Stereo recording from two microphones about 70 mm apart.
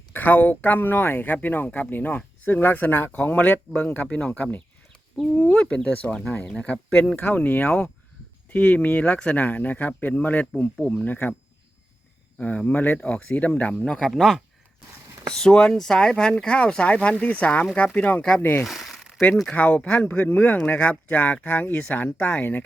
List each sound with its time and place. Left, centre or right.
0.1 s speech: left
12.4 s speech: left
13.0 s speech: centre
18.6 s a sound: centre
19.5 s speech: left